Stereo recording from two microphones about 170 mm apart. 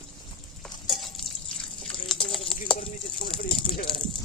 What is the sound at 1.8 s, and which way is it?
Water, 5° left (ahead or behind).